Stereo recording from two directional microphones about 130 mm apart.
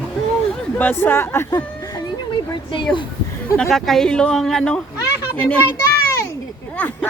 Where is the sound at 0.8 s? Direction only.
15° left (ahead or behind).